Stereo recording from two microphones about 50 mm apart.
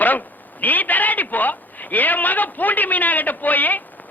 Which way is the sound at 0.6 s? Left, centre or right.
Left.